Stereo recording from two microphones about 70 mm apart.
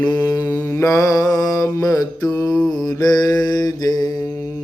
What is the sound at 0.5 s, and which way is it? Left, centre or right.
Mantra, left.